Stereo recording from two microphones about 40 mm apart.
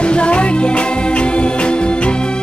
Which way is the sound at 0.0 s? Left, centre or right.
Left.